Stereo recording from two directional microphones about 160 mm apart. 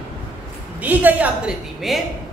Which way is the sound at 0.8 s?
10° right (ahead or behind).